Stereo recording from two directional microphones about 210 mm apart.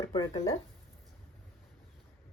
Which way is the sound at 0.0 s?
15° left (ahead or behind).